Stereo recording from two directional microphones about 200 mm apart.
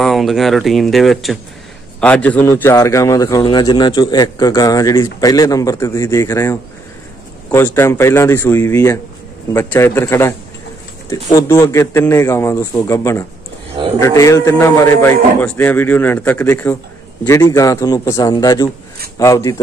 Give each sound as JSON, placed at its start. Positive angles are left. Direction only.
{"t": 0.0, "sound": "speech", "side_deg": 0}